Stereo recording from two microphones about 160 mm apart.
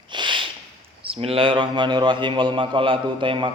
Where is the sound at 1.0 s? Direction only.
35° right (ahead or behind).